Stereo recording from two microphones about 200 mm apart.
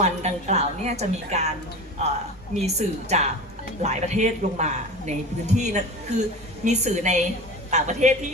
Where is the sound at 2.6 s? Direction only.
35° right (ahead or behind).